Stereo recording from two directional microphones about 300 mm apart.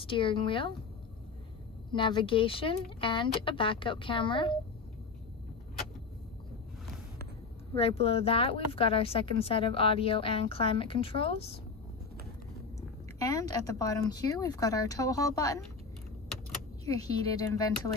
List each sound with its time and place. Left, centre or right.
0.0 s speech: centre
1.9 s speech: centre
7.7 s speech: centre
13.2 s a woman's voice: centre
16.8 s speech: centre